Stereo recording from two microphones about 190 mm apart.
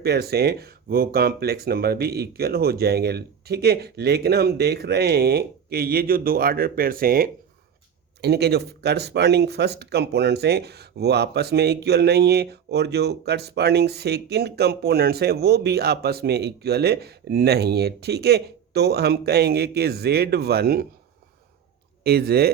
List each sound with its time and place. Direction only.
0.0 s speech: 55° right (ahead or behind)
22.0 s speech: 55° right (ahead or behind)